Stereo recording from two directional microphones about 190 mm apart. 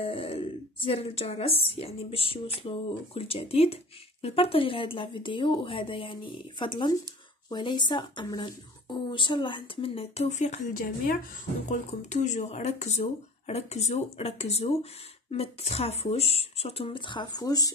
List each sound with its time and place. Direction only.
0.0 s speech: 30° left (ahead or behind)